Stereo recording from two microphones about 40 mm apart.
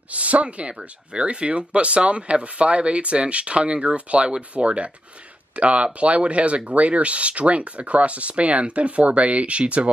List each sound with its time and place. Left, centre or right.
0.1 s speech: right